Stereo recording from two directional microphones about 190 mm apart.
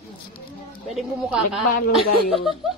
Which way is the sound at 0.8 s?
Centre (ahead or behind).